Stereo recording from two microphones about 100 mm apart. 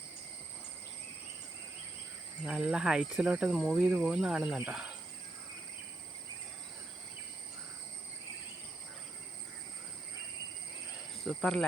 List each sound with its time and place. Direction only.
2.4 s speech: 10° right (ahead or behind)
11.2 s speech: 5° left (ahead or behind)